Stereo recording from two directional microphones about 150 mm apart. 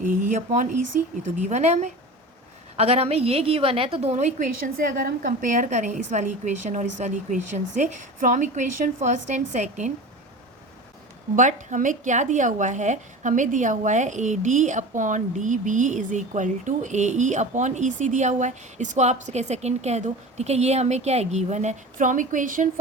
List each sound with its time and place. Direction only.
0.0 s a woman's voice: 60° right (ahead or behind)
11.3 s a woman's voice: 55° right (ahead or behind)